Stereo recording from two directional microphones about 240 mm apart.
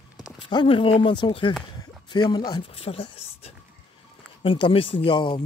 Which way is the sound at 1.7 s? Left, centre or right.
Centre.